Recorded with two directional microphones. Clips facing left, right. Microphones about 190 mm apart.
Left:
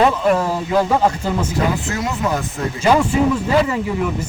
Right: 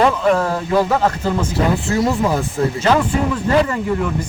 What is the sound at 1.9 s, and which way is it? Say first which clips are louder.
Speech: right 6 dB; 30° right (ahead or behind).